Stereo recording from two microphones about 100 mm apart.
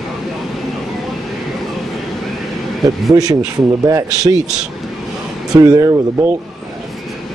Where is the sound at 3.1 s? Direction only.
35° right (ahead or behind).